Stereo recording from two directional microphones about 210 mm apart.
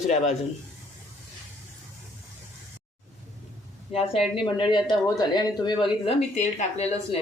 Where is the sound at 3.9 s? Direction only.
30° left (ahead or behind).